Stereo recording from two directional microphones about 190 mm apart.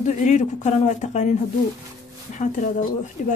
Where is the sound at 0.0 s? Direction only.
40° left (ahead or behind).